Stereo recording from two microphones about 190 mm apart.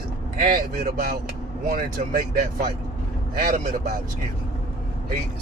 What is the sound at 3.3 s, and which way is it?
Speech, 45° right (ahead or behind).